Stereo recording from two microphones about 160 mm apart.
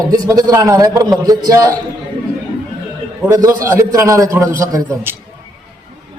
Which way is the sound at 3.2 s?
15° right (ahead or behind).